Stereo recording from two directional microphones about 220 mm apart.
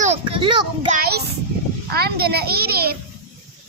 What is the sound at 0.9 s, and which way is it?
A child's voice, 45° right (ahead or behind).